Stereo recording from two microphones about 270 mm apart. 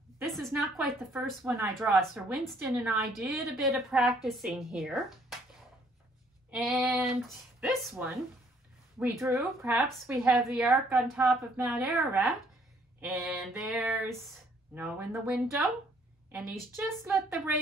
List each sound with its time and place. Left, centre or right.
0.2 s a woman's voice: centre
6.5 s a woman's voice: centre
16.7 s a woman's voice: centre